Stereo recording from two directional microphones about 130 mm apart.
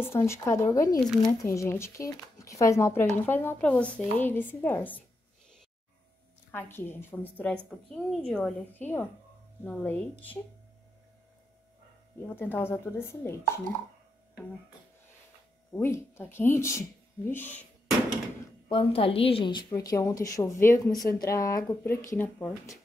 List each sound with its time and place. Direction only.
0.0 s a woman's voice: 20° left (ahead or behind)
6.5 s a woman's voice: 15° left (ahead or behind)
8.7 s a woman's voice: 15° left (ahead or behind)
12.2 s a woman's voice: 15° left (ahead or behind)
15.7 s a woman's voice: 20° left (ahead or behind)
18.7 s a woman's voice: 45° left (ahead or behind)
19.7 s a woman's voice: 25° left (ahead or behind)